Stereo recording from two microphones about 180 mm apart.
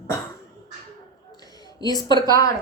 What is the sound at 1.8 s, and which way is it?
Speech, 20° left (ahead or behind).